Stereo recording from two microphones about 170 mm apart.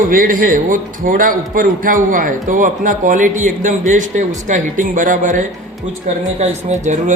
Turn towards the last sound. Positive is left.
turn(degrees=-45)  # may be behind; listen again after turning